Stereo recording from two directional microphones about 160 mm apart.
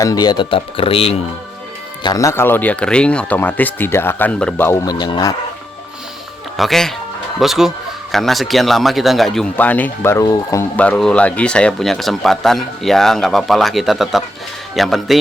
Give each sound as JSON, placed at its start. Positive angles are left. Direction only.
{"t": 0.0, "sound": "speech", "side_deg": 25}
{"t": 2.0, "sound": "speech", "side_deg": 20}
{"t": 4.9, "sound": "speech", "side_deg": 25}
{"t": 6.6, "sound": "speech", "side_deg": 0}
{"t": 10.8, "sound": "speech", "side_deg": 5}